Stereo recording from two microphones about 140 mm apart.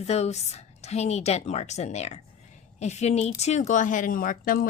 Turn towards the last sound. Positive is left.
turn(degrees=85)